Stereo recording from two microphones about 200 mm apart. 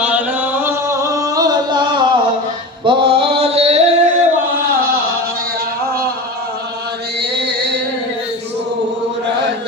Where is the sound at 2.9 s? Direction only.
25° right (ahead or behind).